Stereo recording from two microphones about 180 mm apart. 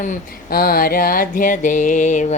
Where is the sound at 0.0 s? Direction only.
50° left (ahead or behind).